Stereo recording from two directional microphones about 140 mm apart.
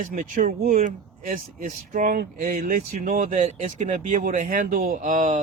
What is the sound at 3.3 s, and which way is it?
Speech, 55° right (ahead or behind).